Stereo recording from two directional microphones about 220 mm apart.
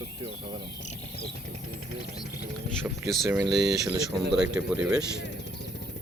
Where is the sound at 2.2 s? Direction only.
45° left (ahead or behind).